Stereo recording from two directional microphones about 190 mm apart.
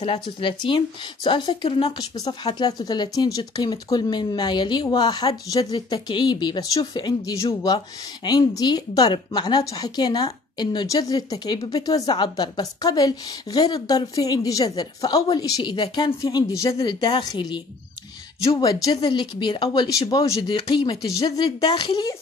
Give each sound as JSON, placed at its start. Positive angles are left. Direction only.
{"t": 0.0, "sound": "a woman's voice", "side_deg": 30}
{"t": 18.6, "sound": "a woman's voice", "side_deg": 20}